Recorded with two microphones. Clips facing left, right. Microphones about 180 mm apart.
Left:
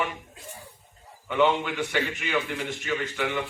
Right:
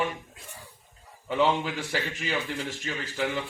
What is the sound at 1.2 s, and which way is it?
A man's voice, 35° right (ahead or behind).